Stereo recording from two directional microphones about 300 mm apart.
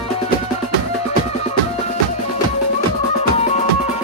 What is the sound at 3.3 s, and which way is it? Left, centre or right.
Music, left.